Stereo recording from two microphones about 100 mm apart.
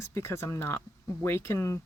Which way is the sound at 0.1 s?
25° left (ahead or behind).